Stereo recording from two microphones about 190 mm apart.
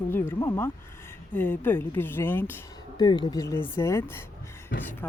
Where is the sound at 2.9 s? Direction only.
25° left (ahead or behind).